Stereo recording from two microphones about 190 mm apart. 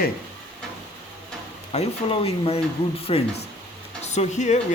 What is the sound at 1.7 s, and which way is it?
Speech, 35° left (ahead or behind).